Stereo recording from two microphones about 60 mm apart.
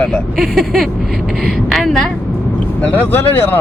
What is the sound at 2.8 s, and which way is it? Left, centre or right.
Speech, left.